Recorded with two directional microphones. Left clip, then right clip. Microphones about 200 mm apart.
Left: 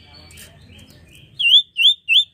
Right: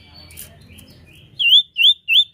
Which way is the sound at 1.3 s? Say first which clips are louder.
Even; 5° left (ahead or behind).